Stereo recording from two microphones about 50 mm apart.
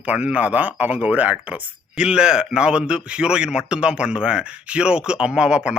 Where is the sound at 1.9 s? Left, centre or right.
Centre.